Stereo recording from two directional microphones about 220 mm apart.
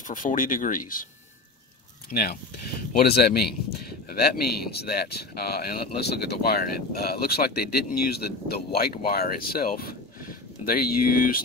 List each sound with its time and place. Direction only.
0.1 s speech: 35° left (ahead or behind)
2.1 s speech: 45° left (ahead or behind)